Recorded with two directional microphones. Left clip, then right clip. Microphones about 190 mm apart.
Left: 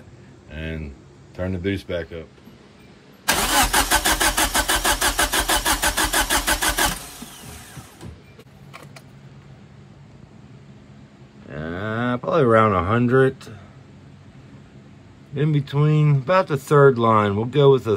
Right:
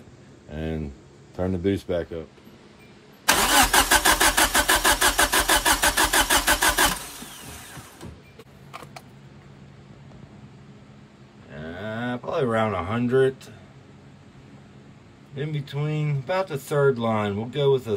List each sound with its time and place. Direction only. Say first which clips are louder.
0.5 s a sound: right 1 dB; 15° right (ahead or behind)
1.3 s speech: right 1 dB; 15° right (ahead or behind)
3.3 s vehicle: even; centre (ahead or behind)
4.2 s engine starting: right 1 dB; 15° right (ahead or behind)
4.5 s engine starting: right 1 dB; centre (ahead or behind)
11.5 s a sound: left 6 dB; 15° left (ahead or behind)
15.3 s speech: left 8 dB; 15° left (ahead or behind)